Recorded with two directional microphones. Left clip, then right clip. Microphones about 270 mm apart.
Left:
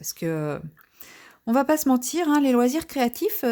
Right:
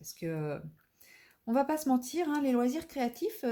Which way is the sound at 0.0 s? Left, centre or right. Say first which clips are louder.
Left 10 dB; left.